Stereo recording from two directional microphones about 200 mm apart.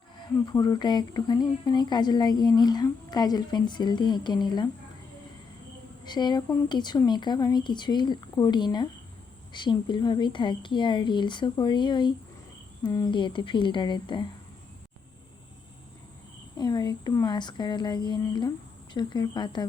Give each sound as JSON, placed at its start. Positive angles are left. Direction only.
{"t": 0.4, "sound": "speech", "side_deg": 20}
{"t": 6.1, "sound": "speech", "side_deg": 20}
{"t": 16.6, "sound": "speech", "side_deg": 20}